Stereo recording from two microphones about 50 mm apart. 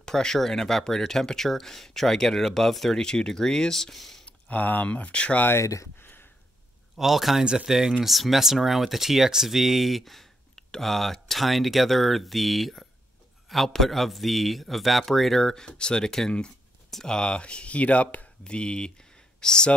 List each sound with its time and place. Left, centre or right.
0.0 s speech: centre
4.3 s speech: left
5.6 s speech: left
5.9 s a sound: left
7.0 s speech: centre; by 18.3 s left
18.4 s speech: centre